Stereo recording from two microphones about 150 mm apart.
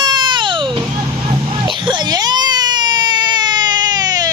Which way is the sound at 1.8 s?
30° right (ahead or behind).